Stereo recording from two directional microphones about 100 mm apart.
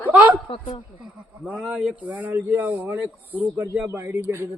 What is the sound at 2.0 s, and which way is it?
A man's voice, 15° right (ahead or behind).